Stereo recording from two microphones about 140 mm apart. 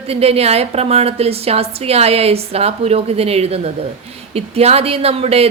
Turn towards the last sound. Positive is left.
turn(degrees=-45)  # may be behind; listen again after turning